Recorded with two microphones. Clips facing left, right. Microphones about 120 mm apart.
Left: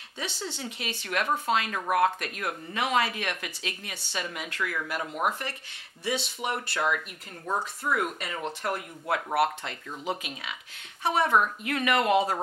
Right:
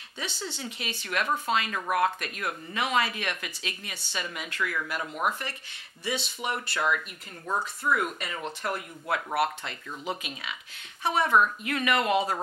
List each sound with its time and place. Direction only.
0.5 s speech: 55° left (ahead or behind)
6.1 s speech: 65° left (ahead or behind)
6.7 s speech: 45° left (ahead or behind)
7.4 s speech: 30° left (ahead or behind)
7.9 s a woman's voice: 45° left (ahead or behind)
11.6 s speech: 50° left (ahead or behind)